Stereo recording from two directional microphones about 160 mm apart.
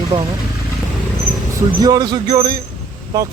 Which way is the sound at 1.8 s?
25° right (ahead or behind).